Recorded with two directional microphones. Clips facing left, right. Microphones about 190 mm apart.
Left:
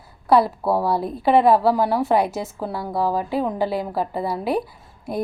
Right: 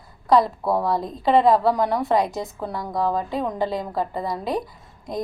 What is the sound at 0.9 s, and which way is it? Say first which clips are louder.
A woman's voice: left 1 dB; 10° left (ahead or behind).